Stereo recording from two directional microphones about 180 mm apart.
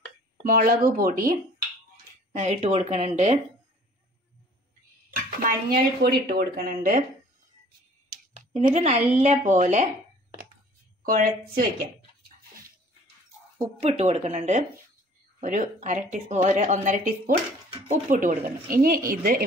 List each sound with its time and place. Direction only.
0.5 s speech: 50° right (ahead or behind)
2.3 s a woman's voice: 40° right (ahead or behind)
5.1 s a sound: 50° right (ahead or behind)
6.2 s speech: 55° right (ahead or behind)
8.1 s a sound: 45° right (ahead or behind)
9.1 s a woman's voice: 40° right (ahead or behind)
11.0 s speech: 50° right (ahead or behind)
13.6 s a woman's voice: 35° right (ahead or behind); by 19.4 s 55° right (ahead or behind)